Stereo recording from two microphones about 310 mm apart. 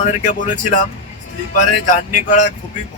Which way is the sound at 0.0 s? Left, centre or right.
Left.